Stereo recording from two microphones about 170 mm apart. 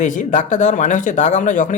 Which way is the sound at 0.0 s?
50° left (ahead or behind).